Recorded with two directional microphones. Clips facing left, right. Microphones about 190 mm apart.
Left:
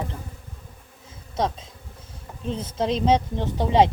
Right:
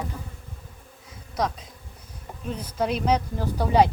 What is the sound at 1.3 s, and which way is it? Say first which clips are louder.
Bee: left 2 dB; 25° left (ahead or behind).